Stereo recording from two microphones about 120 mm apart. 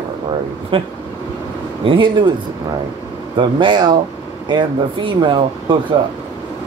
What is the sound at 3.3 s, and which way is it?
Speech, 40° right (ahead or behind).